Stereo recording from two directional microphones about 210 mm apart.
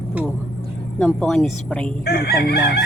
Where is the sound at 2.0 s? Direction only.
50° left (ahead or behind).